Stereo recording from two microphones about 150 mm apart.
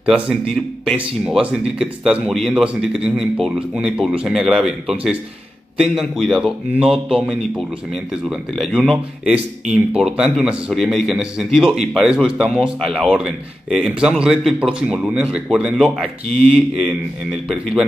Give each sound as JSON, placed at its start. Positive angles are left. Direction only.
{"t": 0.0, "sound": "speech", "side_deg": -5}